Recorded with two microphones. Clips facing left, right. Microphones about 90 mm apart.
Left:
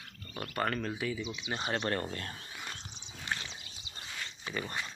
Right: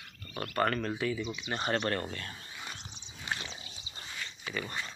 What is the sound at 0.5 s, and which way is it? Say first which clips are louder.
Speech: right 3 dB; 5° left (ahead or behind).